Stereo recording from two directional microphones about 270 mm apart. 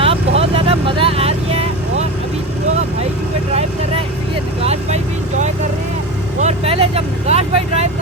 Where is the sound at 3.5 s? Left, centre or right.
Right.